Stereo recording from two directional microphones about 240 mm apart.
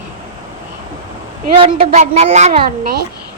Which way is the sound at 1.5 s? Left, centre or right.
Right.